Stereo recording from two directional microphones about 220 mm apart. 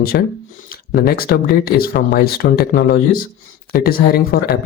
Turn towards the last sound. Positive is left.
turn(degrees=45)  # may be behind; listen again after turning